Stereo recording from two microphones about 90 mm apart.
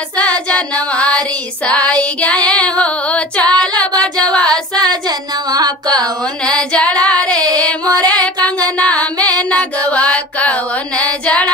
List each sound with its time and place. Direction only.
0.6 s female singing: 15° left (ahead or behind)
3.8 s music: 10° left (ahead or behind)
4.5 s female singing: 50° right (ahead or behind)
5.5 s music: 50° right (ahead or behind)
7.0 s female singing: 15° left (ahead or behind)
7.9 s music: 45° right (ahead or behind)
8.5 s music: 15° left (ahead or behind)